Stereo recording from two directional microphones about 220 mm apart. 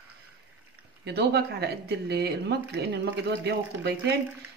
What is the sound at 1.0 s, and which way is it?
Speech, 50° right (ahead or behind).